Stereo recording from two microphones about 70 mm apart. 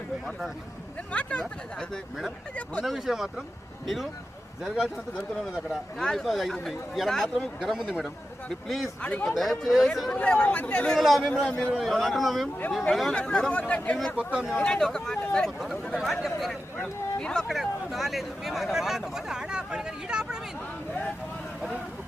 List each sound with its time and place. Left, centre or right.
1.1 s speech: centre
2.8 s speech: centre
8.0 s speech: centre
9.0 s speech: centre
9.3 s speech: centre
10.2 s speech: centre
11.9 s speech: centre; by 13.9 s left
14.2 s speech: centre
14.6 s speech: centre
15.5 s speech: centre
16.7 s speech: centre
17.5 s speech: centre